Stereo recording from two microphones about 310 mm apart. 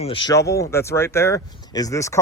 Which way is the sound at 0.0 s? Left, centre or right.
Centre.